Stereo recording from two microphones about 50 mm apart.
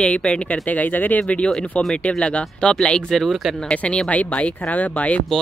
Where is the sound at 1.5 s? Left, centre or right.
Centre.